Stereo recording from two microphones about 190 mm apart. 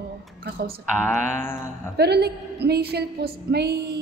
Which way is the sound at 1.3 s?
10° left (ahead or behind).